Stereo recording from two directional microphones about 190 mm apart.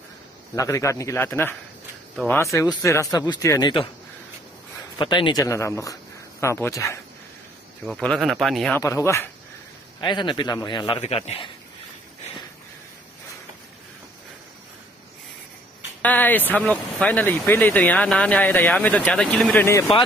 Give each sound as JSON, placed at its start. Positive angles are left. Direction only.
{"t": 0.6, "sound": "speech", "side_deg": 15}
{"t": 4.9, "sound": "speech", "side_deg": 25}
{"t": 7.8, "sound": "speech", "side_deg": 5}
{"t": 8.7, "sound": "a man's voice", "side_deg": 15}
{"t": 16.0, "sound": "speech", "side_deg": 10}
{"t": 19.6, "sound": "speech", "side_deg": 15}